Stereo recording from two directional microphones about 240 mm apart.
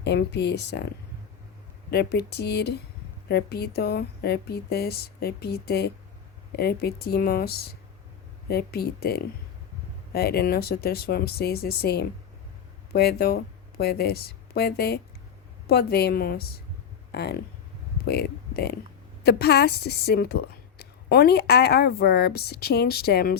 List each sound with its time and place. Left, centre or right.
0.0 s speech: left
1.9 s a woman's voice: left